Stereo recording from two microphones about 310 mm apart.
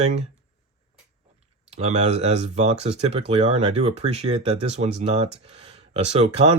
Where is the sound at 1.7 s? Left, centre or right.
Right.